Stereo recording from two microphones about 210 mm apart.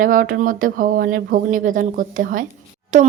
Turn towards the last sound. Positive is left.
turn(degrees=-35)  # may be behind; listen again after turning